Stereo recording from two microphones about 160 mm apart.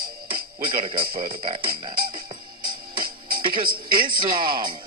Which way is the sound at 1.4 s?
35° right (ahead or behind).